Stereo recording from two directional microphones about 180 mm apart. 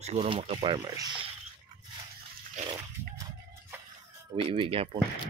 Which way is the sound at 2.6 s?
20° right (ahead or behind).